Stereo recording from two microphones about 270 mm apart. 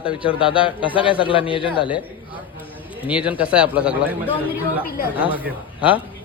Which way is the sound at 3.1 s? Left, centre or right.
Centre.